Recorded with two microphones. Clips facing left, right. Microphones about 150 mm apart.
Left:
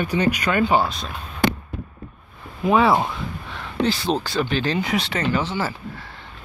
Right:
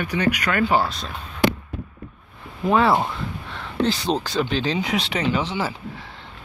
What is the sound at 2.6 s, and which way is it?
Speech, 10° left (ahead or behind).